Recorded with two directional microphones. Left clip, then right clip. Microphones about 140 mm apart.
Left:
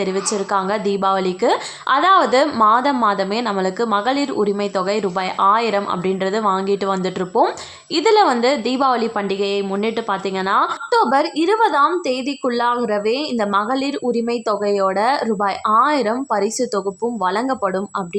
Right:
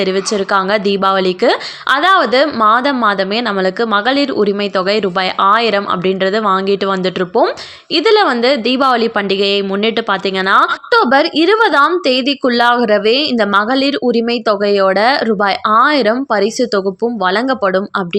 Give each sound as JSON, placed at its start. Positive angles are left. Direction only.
{"t": 0.0, "sound": "a woman's voice", "side_deg": -15}
{"t": 2.0, "sound": "a woman's voice", "side_deg": -5}